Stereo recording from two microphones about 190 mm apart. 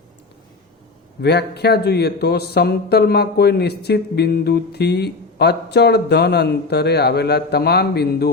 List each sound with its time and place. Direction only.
1.2 s a man's voice: 60° left (ahead or behind)